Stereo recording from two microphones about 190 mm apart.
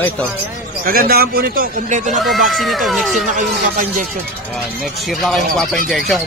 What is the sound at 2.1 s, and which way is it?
Speech, centre (ahead or behind).